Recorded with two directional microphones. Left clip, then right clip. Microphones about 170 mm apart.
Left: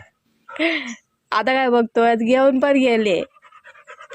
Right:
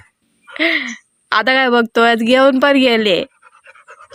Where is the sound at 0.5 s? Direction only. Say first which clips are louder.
Right 5 dB; centre (ahead or behind).